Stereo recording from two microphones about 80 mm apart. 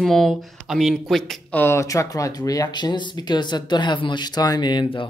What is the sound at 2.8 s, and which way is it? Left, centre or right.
Speech, left.